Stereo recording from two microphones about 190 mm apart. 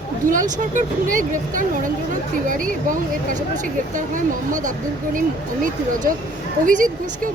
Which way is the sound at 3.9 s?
45° right (ahead or behind).